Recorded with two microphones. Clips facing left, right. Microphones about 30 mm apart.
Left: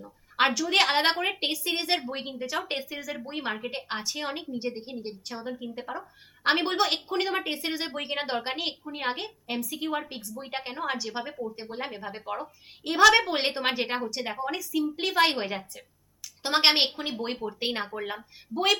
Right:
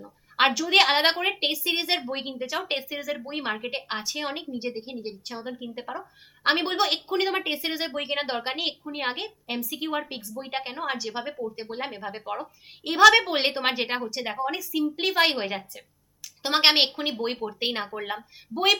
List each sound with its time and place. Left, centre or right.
0.3 s a woman's voice: centre
2.0 s a woman's voice: centre
3.9 s a woman's voice: centre
5.9 s a woman's voice: centre
11.5 s speech: right
11.8 s a woman's voice: centre
13.3 s a woman's voice: centre
17.0 s speech: right
17.5 s a woman's voice: centre